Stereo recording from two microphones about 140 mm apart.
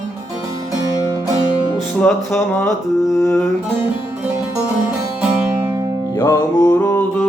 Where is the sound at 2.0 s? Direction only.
5° left (ahead or behind).